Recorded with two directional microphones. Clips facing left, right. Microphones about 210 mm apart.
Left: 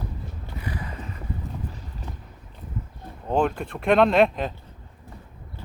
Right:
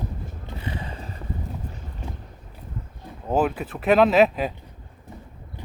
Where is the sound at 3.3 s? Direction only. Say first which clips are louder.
Right 1 dB; 5° right (ahead or behind).